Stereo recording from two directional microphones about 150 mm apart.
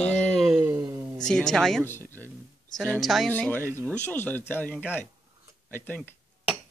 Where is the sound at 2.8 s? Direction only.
Centre (ahead or behind).